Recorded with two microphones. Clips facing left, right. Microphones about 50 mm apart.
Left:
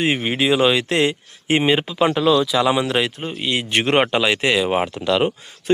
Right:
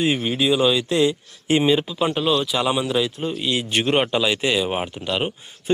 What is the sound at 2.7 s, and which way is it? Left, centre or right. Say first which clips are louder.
Speech: left 2 dB; left.